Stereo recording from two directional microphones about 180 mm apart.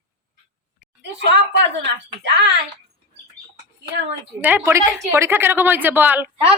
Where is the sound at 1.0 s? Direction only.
70° right (ahead or behind).